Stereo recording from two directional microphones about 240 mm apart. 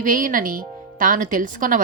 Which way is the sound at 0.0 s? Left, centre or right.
Right.